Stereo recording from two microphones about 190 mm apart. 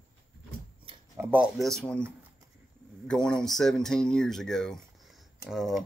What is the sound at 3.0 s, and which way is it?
Speech, 5° left (ahead or behind).